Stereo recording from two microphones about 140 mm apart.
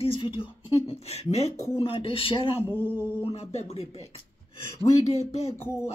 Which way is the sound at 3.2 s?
50° left (ahead or behind).